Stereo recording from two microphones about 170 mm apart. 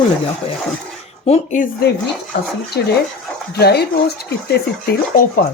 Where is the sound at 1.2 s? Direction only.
40° left (ahead or behind).